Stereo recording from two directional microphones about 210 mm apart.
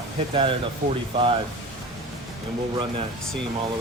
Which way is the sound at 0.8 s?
40° right (ahead or behind).